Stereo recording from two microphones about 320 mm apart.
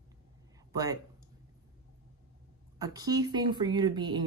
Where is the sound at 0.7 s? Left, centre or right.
Centre.